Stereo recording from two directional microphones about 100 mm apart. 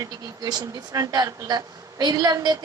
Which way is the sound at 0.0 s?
35° right (ahead or behind).